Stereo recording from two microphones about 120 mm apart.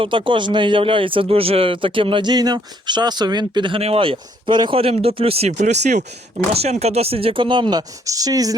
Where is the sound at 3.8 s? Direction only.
55° right (ahead or behind).